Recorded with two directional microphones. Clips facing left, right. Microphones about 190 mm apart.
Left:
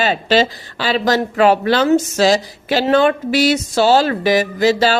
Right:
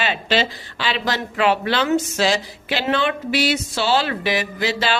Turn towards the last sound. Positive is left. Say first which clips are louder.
# left 8 dB
turn(degrees=40)  # may be behind; listen again after turning